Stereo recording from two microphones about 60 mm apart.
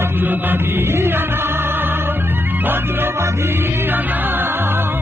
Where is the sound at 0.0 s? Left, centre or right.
Right.